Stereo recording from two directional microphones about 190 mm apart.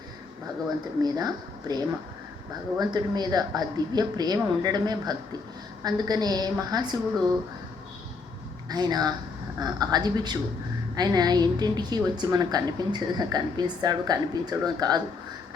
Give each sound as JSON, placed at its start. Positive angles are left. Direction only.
{"t": 1.0, "sound": "a woman's voice", "side_deg": -20}
{"t": 8.7, "sound": "a woman's voice", "side_deg": -20}